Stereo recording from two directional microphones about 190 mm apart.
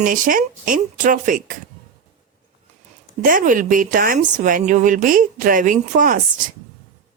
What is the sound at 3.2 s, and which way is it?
Speech, 45° right (ahead or behind).